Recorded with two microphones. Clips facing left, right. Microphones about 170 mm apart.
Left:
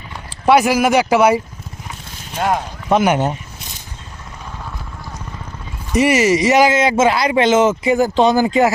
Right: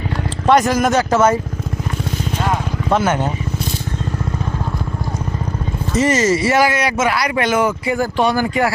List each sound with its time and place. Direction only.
0.4 s speech: 10° left (ahead or behind)
2.9 s speech: 15° left (ahead or behind)
5.9 s speech: 15° left (ahead or behind)